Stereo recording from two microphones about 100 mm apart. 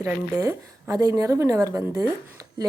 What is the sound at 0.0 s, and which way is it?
A woman's voice, 35° right (ahead or behind).